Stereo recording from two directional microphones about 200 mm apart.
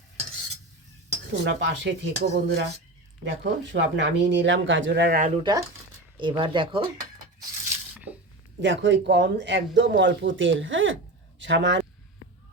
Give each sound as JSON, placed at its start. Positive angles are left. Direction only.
{"t": 1.3, "sound": "speech", "side_deg": -65}
{"t": 5.4, "sound": "speech", "side_deg": -20}
{"t": 8.6, "sound": "speech", "side_deg": -65}